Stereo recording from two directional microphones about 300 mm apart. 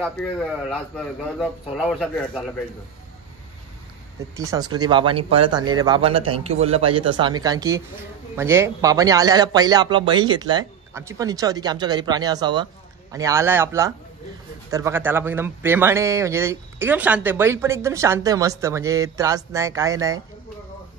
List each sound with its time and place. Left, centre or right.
0.0 s a man's voice: centre
4.4 s a man's voice: centre